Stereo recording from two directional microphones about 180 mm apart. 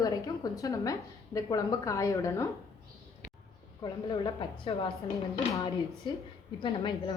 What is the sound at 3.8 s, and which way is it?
Speech, 25° left (ahead or behind).